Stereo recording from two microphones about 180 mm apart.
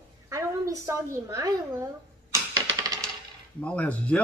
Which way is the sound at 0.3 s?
15° right (ahead or behind).